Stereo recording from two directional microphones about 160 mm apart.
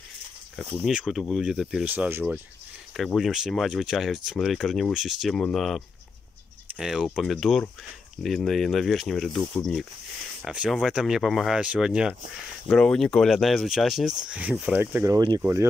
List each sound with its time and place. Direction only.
0.8 s speech: 5° right (ahead or behind)
3.0 s speech: centre (ahead or behind)
15.1 s speech: 25° right (ahead or behind)